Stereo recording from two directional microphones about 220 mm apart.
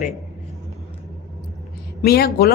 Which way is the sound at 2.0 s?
45° left (ahead or behind).